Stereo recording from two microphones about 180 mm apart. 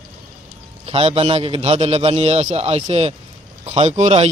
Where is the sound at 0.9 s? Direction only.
35° right (ahead or behind).